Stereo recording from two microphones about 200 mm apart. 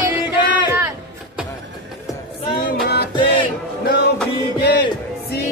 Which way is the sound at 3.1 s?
25° left (ahead or behind).